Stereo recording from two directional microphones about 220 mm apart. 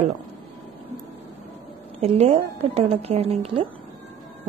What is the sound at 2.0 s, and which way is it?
A woman's voice, 30° right (ahead or behind).